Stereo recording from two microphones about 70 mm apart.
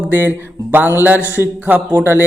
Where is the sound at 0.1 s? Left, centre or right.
Right.